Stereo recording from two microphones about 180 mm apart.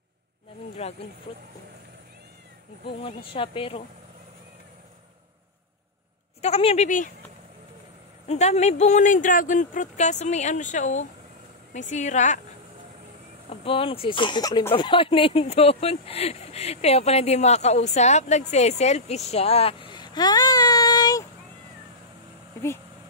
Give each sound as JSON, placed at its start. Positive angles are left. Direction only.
{"t": 0.8, "sound": "speech", "side_deg": 35}
{"t": 2.9, "sound": "speech", "side_deg": 30}
{"t": 6.4, "sound": "speech", "side_deg": 35}
{"t": 8.3, "sound": "a woman's voice", "side_deg": 40}
{"t": 13.7, "sound": "speech", "side_deg": 30}